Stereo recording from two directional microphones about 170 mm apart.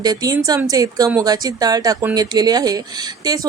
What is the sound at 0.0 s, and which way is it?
Speech, 20° right (ahead or behind).